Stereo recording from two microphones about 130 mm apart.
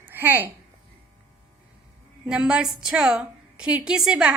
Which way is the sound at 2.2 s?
5° right (ahead or behind).